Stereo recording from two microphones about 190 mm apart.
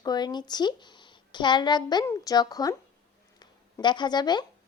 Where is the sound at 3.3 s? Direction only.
25° left (ahead or behind).